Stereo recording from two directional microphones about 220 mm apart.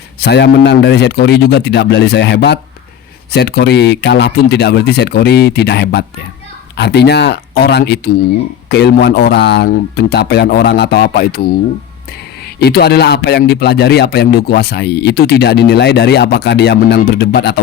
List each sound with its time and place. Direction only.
0.2 s speech: 50° left (ahead or behind)
12.5 s speech: 45° left (ahead or behind)